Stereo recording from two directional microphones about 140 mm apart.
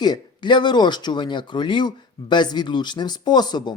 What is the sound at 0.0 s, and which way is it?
Speech, 30° left (ahead or behind).